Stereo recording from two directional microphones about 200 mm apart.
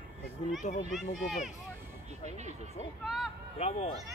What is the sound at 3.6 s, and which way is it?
Speech, 30° left (ahead or behind).